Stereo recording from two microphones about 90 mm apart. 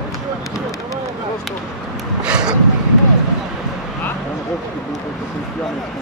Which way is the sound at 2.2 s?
10° right (ahead or behind).